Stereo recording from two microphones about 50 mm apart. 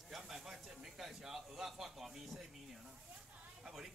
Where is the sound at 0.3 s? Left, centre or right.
Centre.